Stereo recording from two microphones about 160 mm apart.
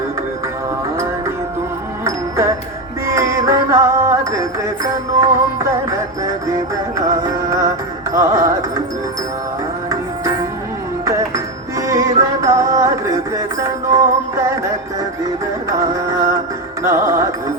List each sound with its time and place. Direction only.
2.0 s music: 20° right (ahead or behind)
11.8 s music: 20° right (ahead or behind)
15.7 s music: 20° right (ahead or behind)